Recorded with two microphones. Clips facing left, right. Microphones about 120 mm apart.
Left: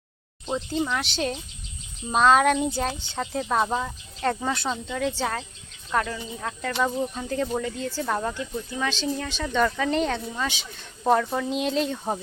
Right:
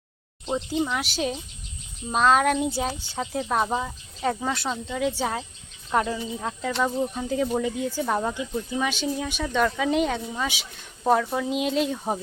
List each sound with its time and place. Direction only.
0.4 s speech: 10° right (ahead or behind)